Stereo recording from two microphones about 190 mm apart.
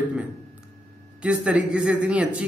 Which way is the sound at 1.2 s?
5° right (ahead or behind).